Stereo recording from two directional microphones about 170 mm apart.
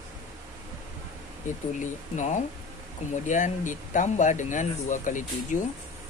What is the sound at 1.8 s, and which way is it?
Speech, 45° left (ahead or behind).